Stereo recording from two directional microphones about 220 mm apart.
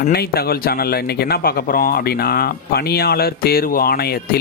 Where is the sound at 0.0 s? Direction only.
45° left (ahead or behind).